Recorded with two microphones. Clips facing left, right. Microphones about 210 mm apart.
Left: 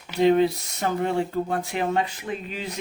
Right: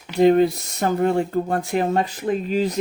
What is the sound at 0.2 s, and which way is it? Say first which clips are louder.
Speech: right 4 dB; 45° right (ahead or behind).